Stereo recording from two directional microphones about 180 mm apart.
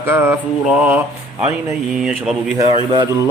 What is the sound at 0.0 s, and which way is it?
A man's voice, 15° right (ahead or behind).